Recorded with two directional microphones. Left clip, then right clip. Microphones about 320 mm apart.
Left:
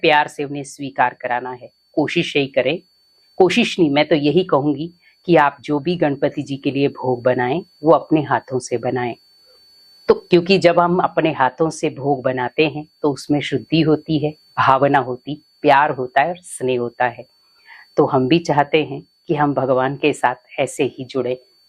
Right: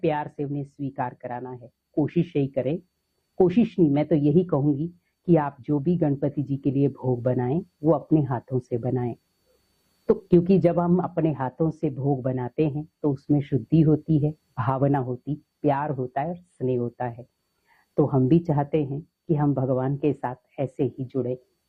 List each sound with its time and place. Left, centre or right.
0.0 s speech: centre
10.2 s speech: centre
12.8 s speech: left
13.2 s speech: centre
17.7 s a sound: centre
18.3 s speech: centre